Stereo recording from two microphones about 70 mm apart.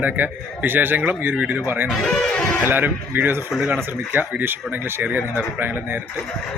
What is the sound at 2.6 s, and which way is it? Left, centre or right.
Speech, right.